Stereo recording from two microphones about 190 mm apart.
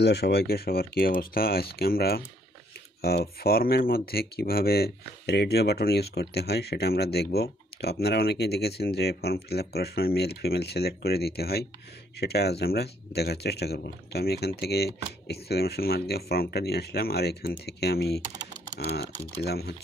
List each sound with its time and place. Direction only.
0.0 s speech: 60° left (ahead or behind)